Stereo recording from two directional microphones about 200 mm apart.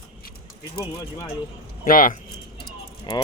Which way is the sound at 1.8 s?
45° left (ahead or behind).